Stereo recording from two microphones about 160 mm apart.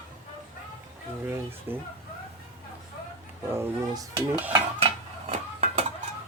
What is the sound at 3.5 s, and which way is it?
Speech, 20° right (ahead or behind).